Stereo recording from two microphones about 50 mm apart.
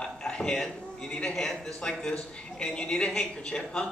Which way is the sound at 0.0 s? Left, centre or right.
Centre.